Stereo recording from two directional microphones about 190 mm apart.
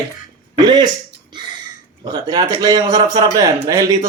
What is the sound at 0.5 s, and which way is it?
Speech, 25° right (ahead or behind).